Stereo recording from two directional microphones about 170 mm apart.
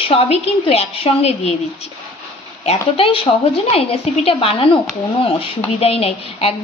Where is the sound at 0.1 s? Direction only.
35° left (ahead or behind).